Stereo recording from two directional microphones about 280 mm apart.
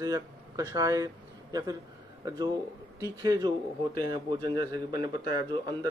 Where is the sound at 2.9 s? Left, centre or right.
Centre.